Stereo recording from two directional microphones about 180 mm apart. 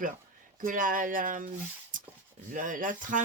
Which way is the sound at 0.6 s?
50° right (ahead or behind).